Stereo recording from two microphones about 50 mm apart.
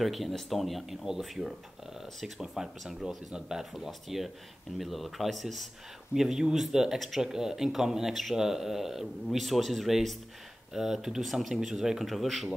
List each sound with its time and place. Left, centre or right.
0.0 s speech: centre
6.1 s speech: centre